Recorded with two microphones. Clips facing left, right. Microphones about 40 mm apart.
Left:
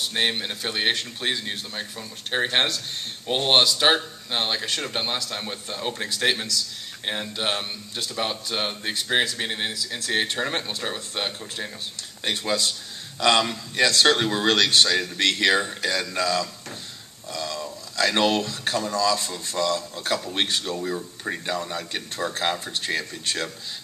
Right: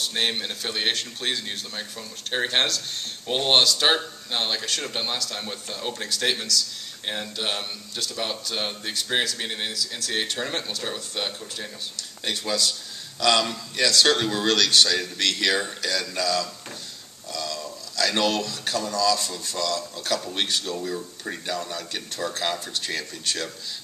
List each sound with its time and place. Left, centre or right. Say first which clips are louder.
0.0 s a man's voice: left 1 dB; centre